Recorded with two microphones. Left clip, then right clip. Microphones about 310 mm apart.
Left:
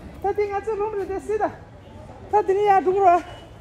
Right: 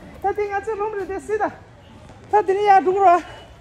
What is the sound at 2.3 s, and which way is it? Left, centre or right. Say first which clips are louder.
Speech: right 3 dB; right.